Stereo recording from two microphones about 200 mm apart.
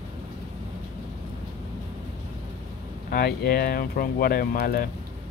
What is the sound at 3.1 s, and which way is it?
Speech, 50° left (ahead or behind).